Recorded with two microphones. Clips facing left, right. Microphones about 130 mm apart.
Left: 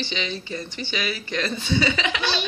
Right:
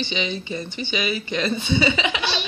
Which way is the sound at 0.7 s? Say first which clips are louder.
Right 4 dB; 5° right (ahead or behind).